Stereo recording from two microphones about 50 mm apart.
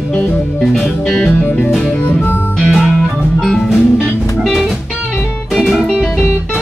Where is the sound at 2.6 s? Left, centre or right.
Centre.